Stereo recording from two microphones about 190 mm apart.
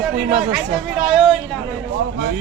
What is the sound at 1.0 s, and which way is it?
Speech, centre (ahead or behind).